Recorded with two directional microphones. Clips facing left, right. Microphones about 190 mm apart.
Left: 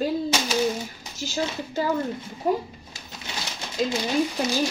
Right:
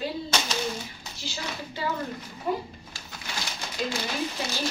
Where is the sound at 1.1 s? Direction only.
45° left (ahead or behind).